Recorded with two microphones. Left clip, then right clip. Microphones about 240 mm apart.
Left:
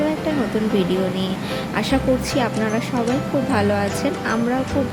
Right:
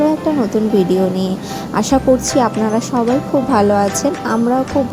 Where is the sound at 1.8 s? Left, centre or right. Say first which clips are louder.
Right 7 dB; right.